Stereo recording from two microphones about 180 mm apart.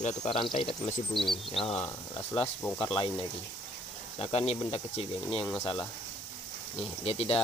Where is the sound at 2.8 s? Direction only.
25° left (ahead or behind).